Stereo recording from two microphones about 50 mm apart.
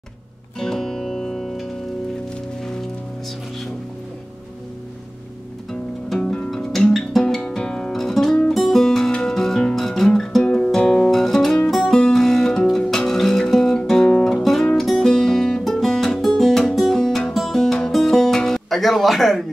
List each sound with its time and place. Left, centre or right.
0.6 s music: centre
5.7 s music: centre
7.1 s guitar: centre
7.9 s music: centre
10.0 s guitar: centre
11.1 s music: centre
14.4 s music: centre
17.6 s music: centre